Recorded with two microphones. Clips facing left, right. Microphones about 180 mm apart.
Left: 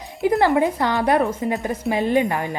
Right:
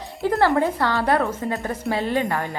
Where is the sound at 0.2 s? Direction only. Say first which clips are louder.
Left 2 dB; 15° left (ahead or behind).